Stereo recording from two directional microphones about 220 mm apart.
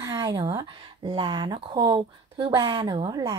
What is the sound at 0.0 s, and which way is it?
A woman's voice, 20° right (ahead or behind).